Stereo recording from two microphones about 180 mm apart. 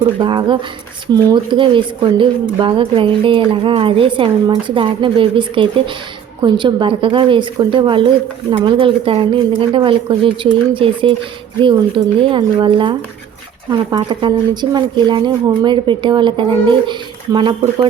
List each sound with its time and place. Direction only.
0.2 s speech: 25° right (ahead or behind)
12.2 s speech: 25° right (ahead or behind)